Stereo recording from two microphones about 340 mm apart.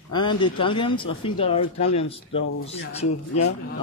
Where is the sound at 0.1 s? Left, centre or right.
Centre.